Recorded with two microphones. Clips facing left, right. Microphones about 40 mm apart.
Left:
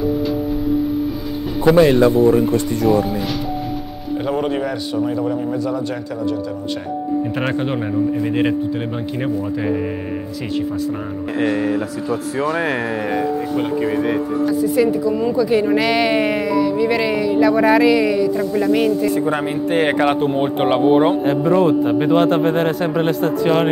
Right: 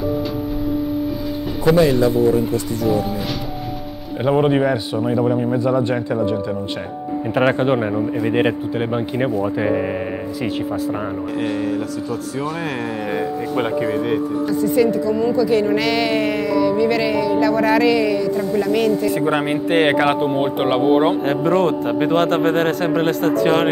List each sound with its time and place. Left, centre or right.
0.0 s music: centre
1.6 s a woman's voice: centre
2.5 s speech: left
2.9 s a man's voice: centre
4.2 s a man's voice: centre
7.3 s speech: centre
11.4 s a woman's voice: left
14.0 s a woman's voice: centre
19.1 s a man's voice: right
20.1 s a man's voice: centre